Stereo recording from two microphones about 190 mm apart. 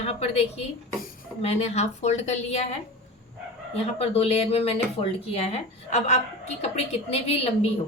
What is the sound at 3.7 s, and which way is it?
A woman's voice, 35° left (ahead or behind).